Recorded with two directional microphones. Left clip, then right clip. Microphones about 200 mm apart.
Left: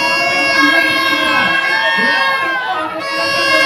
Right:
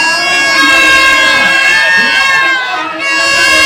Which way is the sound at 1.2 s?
65° left (ahead or behind).